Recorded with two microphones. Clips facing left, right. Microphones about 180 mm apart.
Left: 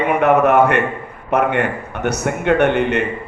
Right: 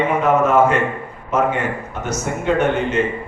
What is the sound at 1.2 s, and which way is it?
A man's voice, 65° left (ahead or behind).